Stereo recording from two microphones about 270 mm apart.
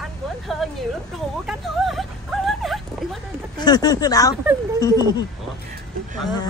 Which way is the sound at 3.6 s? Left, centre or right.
Centre.